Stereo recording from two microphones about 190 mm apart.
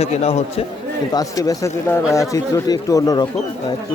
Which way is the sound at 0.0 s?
35° left (ahead or behind).